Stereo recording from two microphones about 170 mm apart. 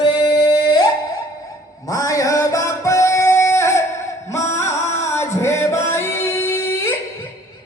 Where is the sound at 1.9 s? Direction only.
20° left (ahead or behind).